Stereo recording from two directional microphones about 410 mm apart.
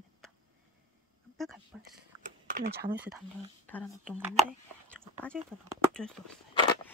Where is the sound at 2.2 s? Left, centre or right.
Centre.